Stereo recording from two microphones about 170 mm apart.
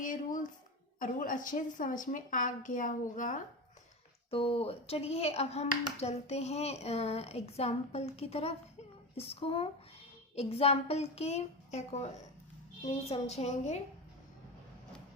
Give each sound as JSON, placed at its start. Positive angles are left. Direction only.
{"t": 0.0, "sound": "a sound", "side_deg": 50}
{"t": 0.9, "sound": "a woman's voice", "side_deg": 50}
{"t": 4.3, "sound": "a woman's voice", "side_deg": 35}